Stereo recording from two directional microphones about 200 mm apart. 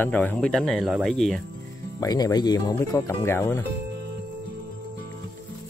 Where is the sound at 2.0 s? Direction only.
20° left (ahead or behind).